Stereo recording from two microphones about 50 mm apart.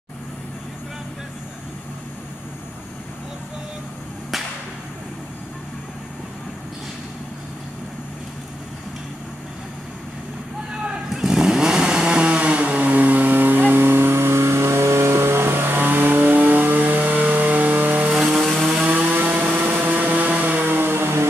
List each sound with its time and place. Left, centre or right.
11.1 s vehicle: centre; by 18.1 s right
18.6 s vehicle: centre
19.3 s vehicle: right